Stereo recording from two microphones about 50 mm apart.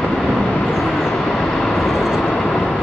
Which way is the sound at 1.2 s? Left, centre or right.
Centre.